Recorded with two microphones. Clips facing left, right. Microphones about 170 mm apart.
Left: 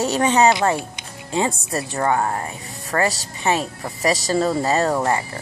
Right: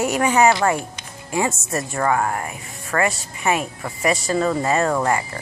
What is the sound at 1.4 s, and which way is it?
Speech, 30° left (ahead or behind).